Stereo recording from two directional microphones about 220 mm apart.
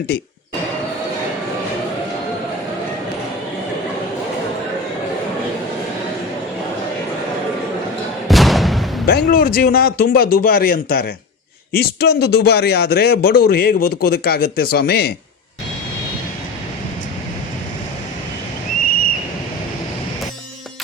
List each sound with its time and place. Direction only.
8.3 s artillery fire: centre (ahead or behind)
9.0 s speech: 40° left (ahead or behind)